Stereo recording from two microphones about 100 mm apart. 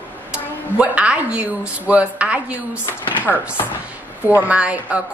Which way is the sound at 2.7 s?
25° left (ahead or behind).